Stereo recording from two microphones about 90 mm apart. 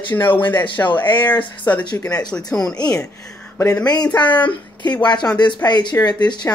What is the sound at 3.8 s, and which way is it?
Speech, 50° left (ahead or behind).